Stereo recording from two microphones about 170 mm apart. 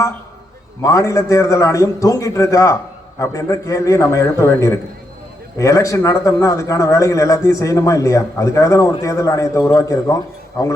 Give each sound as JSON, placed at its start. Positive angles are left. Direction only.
{"t": 0.8, "sound": "a man's voice", "side_deg": 20}